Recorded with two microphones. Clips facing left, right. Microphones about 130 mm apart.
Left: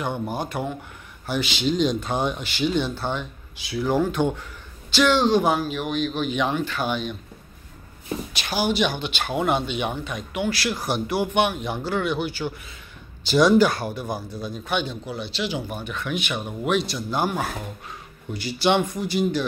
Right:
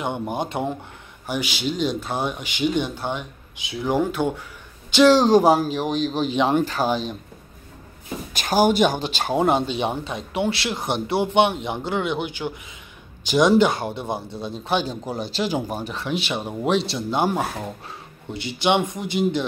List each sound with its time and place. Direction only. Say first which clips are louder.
0.0 s speech: right 1 dB; 20° right (ahead or behind)
1.2 s speech: left 1 dB; 15° right (ahead or behind)
5.0 s speech: right 5 dB; 40° right (ahead or behind)
8.3 s speech: right 7 dB; 45° right (ahead or behind); by 19.4 s 20° right (ahead or behind)